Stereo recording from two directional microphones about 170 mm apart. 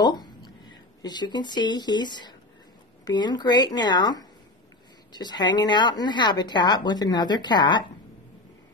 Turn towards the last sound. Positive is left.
turn(degrees=25)  # may be behind; listen again after turning